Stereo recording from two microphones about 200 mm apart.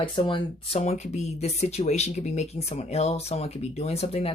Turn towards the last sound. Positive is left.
turn(degrees=30)  # may be behind; listen again after turning